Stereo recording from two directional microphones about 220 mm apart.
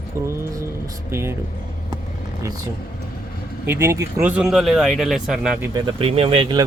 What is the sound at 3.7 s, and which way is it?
Speech, 10° right (ahead or behind).